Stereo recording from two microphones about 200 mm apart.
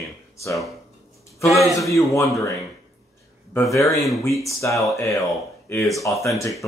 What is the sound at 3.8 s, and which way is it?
Speech, centre (ahead or behind).